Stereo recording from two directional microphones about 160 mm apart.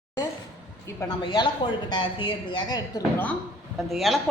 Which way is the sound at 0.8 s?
20° left (ahead or behind).